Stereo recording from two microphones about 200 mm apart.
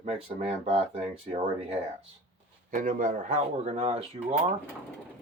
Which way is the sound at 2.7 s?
40° right (ahead or behind).